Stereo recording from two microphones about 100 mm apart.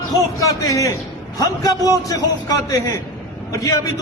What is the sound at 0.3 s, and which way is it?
A man's voice, 35° left (ahead or behind).